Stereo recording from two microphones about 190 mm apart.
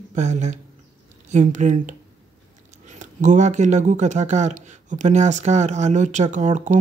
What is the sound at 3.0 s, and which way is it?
Speech, 40° right (ahead or behind).